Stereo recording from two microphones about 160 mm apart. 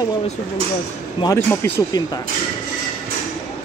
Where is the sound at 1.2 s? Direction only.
20° left (ahead or behind).